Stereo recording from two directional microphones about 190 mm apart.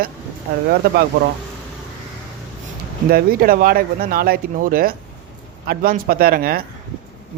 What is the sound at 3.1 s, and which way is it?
Speech, 50° right (ahead or behind).